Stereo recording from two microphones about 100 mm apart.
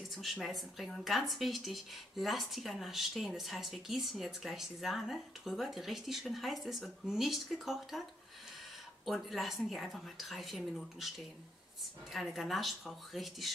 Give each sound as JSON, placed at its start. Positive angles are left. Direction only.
{"t": 0.1, "sound": "speech", "side_deg": 0}
{"t": 9.0, "sound": "speech", "side_deg": 0}